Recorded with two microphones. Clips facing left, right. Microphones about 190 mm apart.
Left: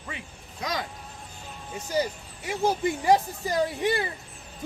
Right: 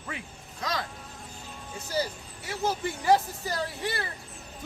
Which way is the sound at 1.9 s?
15° left (ahead or behind).